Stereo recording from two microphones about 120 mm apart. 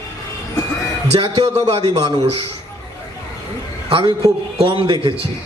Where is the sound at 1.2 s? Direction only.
35° right (ahead or behind).